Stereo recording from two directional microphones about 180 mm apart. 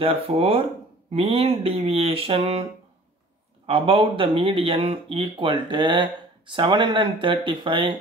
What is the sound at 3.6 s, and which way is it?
Speech, 30° right (ahead or behind).